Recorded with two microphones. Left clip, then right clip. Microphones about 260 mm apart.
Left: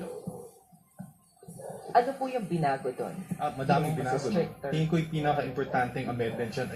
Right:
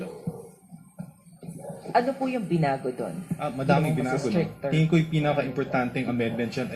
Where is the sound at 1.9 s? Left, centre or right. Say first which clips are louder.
Right 2 dB; right.